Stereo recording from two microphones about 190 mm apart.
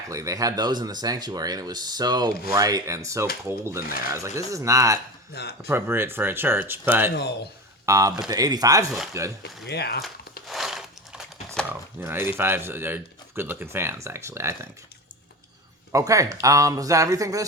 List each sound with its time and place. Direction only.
0.1 s a man's voice: 15° right (ahead or behind)
5.3 s speech: 60° left (ahead or behind)
5.6 s a man's voice: 10° right (ahead or behind)
7.1 s speech: 60° left (ahead or behind)
7.9 s a man's voice: 15° right (ahead or behind)
9.6 s speech: 60° left (ahead or behind)
10.5 s a sound: centre (ahead or behind)
15.9 s a man's voice: 15° right (ahead or behind)